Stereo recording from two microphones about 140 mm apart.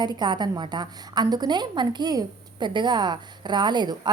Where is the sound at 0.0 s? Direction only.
30° right (ahead or behind).